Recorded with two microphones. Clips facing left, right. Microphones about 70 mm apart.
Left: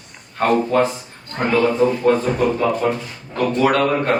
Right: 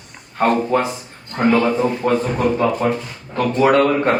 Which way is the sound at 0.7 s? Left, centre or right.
Centre.